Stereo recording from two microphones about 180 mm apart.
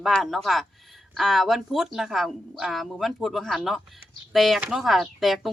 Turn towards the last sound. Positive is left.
turn(degrees=0)  # may be behind; listen again after turning